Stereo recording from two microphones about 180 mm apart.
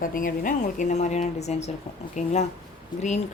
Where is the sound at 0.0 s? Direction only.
50° left (ahead or behind).